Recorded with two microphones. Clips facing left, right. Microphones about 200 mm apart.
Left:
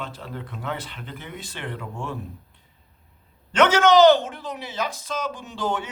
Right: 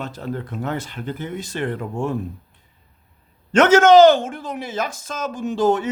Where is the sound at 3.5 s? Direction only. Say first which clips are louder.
Right 5 dB; 45° right (ahead or behind).